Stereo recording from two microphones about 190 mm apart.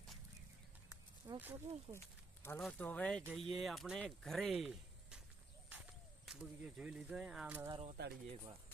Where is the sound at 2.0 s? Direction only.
10° left (ahead or behind); by 7.6 s 5° right (ahead or behind).